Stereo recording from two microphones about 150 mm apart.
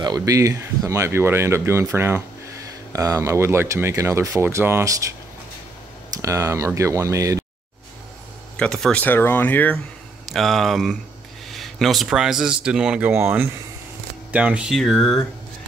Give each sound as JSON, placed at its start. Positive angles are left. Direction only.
{"t": 0.0, "sound": "speech", "side_deg": -25}
{"t": 6.1, "sound": "speech", "side_deg": -20}
{"t": 8.5, "sound": "speech", "side_deg": 5}
{"t": 10.3, "sound": "speech", "side_deg": 0}
{"t": 14.8, "sound": "speech", "side_deg": 0}